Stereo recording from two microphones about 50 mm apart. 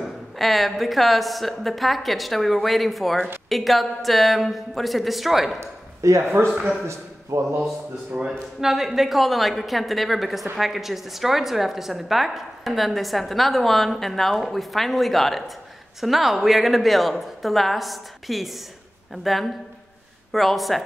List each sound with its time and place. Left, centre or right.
0.0 s a woman's voice: centre
5.6 s a sound: right
7.3 s speech: right
8.3 s a woman's voice: centre